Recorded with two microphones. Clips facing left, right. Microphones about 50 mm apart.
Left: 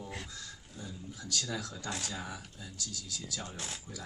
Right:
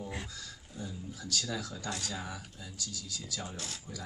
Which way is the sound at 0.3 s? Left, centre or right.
Centre.